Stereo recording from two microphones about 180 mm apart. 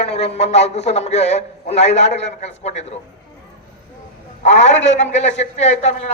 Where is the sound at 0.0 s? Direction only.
35° left (ahead or behind).